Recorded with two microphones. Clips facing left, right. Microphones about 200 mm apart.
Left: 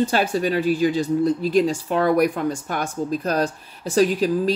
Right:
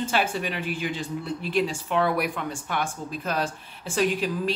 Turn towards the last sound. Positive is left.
turn(degrees=40)  # may be behind; listen again after turning